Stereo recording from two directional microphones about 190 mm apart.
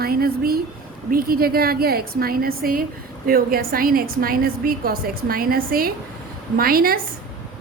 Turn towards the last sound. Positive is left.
turn(degrees=-50)  # may be behind; listen again after turning